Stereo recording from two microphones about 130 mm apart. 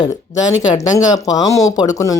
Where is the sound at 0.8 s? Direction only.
25° left (ahead or behind).